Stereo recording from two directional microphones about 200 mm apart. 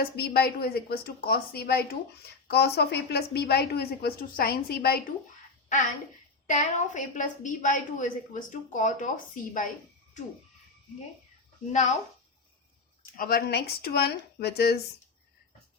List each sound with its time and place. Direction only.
0.0 s a woman's voice: 55° left (ahead or behind)
6.5 s a woman's voice: 40° left (ahead or behind)
11.7 s a woman's voice: 35° left (ahead or behind)
13.1 s a woman's voice: 50° left (ahead or behind)